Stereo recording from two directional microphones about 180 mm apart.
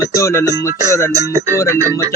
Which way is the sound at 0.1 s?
15° left (ahead or behind).